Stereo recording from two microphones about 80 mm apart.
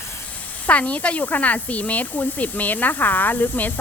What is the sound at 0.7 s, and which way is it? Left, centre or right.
Speech, centre.